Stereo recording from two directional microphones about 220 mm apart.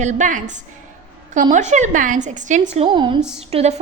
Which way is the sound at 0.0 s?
35° right (ahead or behind).